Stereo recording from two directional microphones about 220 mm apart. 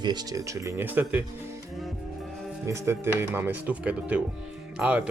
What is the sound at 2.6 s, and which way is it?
A man's voice, 15° right (ahead or behind).